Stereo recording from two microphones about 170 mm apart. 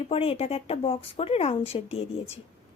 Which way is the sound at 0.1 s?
35° left (ahead or behind).